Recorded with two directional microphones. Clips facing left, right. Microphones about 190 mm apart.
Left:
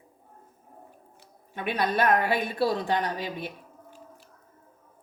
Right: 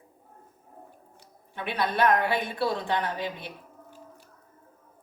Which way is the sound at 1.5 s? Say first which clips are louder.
Left 1 dB; 45° left (ahead or behind).